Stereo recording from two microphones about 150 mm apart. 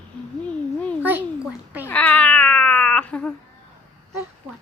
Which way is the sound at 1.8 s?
10° left (ahead or behind).